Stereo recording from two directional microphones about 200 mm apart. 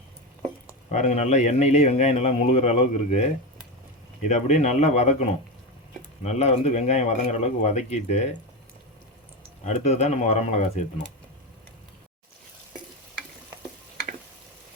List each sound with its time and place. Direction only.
0.9 s a man's voice: 35° left (ahead or behind)
6.2 s a man's voice: 35° left (ahead or behind)
9.6 s a man's voice: 35° left (ahead or behind)